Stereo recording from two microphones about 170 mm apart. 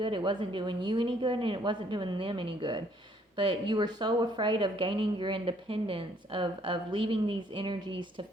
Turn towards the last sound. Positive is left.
turn(degrees=-30)  # may be behind; listen again after turning